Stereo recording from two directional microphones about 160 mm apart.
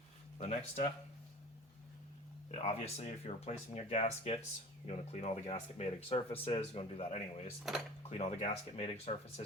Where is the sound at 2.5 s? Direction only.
40° left (ahead or behind).